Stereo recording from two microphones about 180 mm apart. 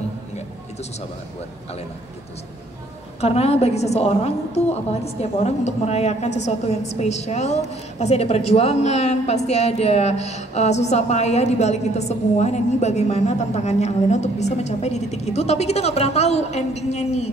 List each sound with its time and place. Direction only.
3.2 s a woman's voice: 35° left (ahead or behind)